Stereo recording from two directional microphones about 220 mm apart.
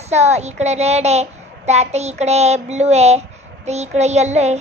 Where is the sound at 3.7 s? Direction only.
30° right (ahead or behind).